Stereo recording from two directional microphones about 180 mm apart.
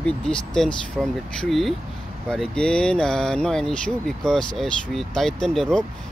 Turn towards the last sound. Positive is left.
turn(degrees=0)  # may be behind; listen again after turning